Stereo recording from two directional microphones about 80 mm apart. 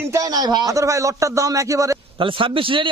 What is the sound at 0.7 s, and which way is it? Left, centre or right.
A man's voice, right.